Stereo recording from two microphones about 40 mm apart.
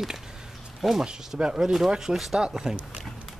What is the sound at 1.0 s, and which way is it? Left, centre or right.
Speech, centre.